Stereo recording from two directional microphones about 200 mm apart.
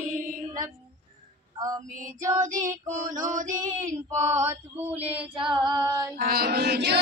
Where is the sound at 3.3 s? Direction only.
40° right (ahead or behind).